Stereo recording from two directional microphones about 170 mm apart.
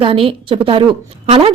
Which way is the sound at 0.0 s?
30° right (ahead or behind).